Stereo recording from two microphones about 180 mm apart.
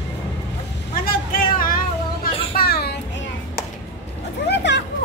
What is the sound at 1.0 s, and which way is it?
Vehicle, 55° left (ahead or behind).